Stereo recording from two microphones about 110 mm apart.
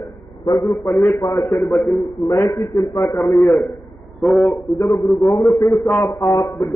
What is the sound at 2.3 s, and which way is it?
Speech, 30° left (ahead or behind).